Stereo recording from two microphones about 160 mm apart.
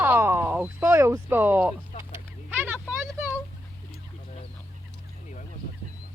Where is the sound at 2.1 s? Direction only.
15° right (ahead or behind).